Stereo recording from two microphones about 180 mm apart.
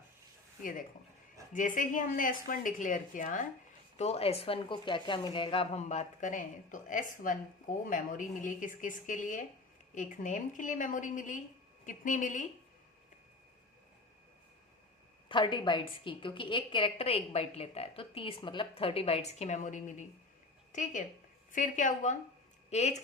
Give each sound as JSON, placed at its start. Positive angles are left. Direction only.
{"t": 0.6, "sound": "a woman's voice", "side_deg": 50}
{"t": 15.3, "sound": "a woman's voice", "side_deg": 25}